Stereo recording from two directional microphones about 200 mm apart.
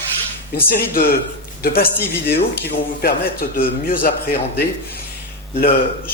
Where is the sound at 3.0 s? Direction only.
50° left (ahead or behind).